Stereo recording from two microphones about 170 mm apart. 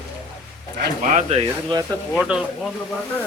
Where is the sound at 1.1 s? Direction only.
35° right (ahead or behind).